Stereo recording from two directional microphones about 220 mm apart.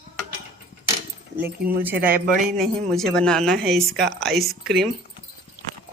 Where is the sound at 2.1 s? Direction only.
40° right (ahead or behind).